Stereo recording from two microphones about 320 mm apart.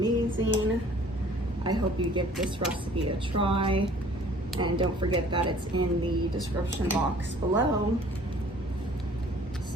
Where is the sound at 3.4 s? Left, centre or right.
Centre.